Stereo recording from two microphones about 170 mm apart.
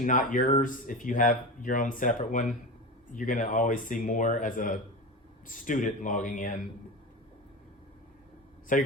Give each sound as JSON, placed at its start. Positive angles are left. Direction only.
{"t": 0.0, "sound": "speech", "side_deg": 50}
{"t": 8.7, "sound": "speech", "side_deg": 50}